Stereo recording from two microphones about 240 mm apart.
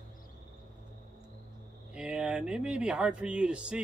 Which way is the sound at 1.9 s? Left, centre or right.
Centre.